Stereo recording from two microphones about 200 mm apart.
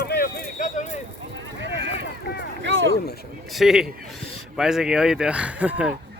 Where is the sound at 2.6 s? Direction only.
70° right (ahead or behind).